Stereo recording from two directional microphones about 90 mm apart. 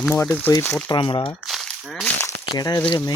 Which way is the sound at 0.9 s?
60° left (ahead or behind).